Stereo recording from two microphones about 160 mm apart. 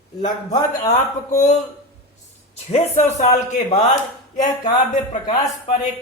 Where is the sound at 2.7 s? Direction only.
40° left (ahead or behind).